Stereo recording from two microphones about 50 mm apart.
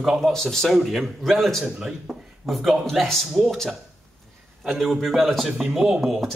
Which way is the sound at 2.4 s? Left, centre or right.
Centre.